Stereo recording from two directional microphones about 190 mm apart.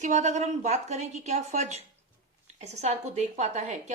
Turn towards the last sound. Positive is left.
turn(degrees=-35)  # may be behind; listen again after turning